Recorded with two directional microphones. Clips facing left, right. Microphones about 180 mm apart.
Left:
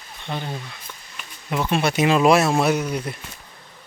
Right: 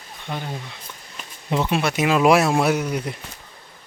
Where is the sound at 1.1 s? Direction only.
25° right (ahead or behind).